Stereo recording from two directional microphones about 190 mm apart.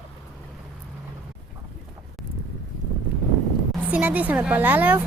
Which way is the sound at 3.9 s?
10° right (ahead or behind).